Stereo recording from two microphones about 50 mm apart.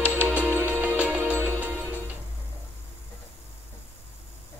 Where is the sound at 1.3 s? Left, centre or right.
Right.